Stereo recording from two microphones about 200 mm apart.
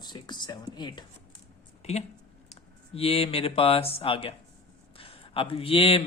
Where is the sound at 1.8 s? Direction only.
30° left (ahead or behind).